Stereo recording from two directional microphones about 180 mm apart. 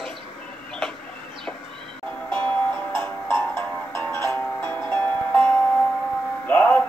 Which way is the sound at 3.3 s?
15° left (ahead or behind).